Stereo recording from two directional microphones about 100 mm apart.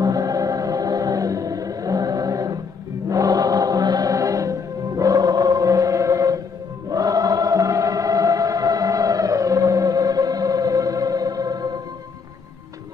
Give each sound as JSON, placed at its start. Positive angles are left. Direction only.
{"t": 0.0, "sound": "music", "side_deg": -40}
{"t": 6.9, "sound": "choir", "side_deg": -40}